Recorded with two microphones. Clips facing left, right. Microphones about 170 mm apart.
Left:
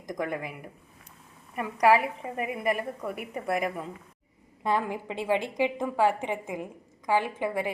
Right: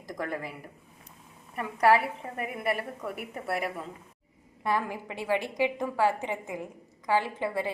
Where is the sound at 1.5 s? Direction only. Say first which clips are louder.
Left 1 dB; 5° left (ahead or behind).